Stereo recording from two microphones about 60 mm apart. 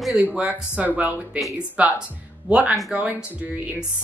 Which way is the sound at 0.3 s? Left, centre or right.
Right.